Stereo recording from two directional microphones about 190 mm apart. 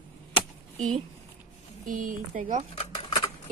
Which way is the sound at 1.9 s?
45° right (ahead or behind).